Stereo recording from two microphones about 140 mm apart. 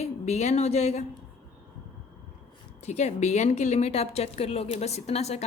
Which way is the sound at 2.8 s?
55° left (ahead or behind).